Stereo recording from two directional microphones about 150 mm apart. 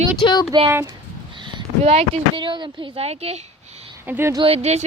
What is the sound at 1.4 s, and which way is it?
Speech, 30° right (ahead or behind).